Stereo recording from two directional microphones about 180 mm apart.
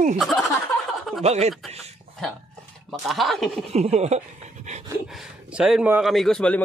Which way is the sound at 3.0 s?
Centre (ahead or behind).